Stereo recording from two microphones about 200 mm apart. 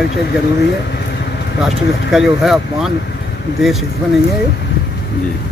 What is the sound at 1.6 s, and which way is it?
Speech, centre (ahead or behind).